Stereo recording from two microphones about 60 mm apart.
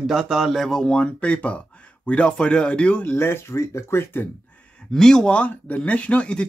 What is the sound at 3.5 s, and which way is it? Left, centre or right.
Speech, left.